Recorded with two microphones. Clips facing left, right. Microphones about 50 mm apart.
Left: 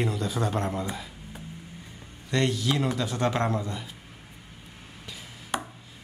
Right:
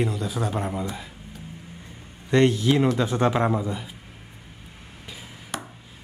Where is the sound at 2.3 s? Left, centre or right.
Right.